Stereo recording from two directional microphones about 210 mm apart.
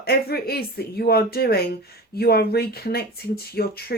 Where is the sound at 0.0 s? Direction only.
45° left (ahead or behind).